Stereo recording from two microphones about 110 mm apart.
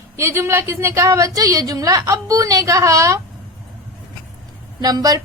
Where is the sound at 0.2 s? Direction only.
25° right (ahead or behind).